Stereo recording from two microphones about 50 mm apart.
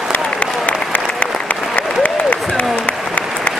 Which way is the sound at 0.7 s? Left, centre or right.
Left.